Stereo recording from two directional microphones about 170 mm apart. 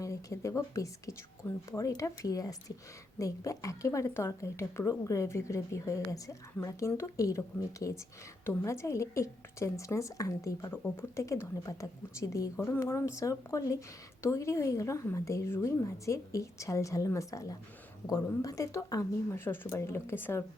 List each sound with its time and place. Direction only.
0.0 s a woman's voice: 20° left (ahead or behind)